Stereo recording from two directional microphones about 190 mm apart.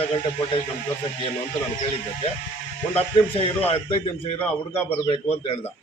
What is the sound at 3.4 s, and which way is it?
Speech, 30° left (ahead or behind).